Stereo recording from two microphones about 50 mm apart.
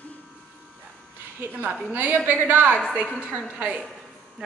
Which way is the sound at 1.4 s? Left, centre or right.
Right.